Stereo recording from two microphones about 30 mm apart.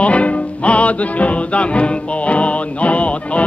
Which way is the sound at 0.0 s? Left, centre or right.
Left.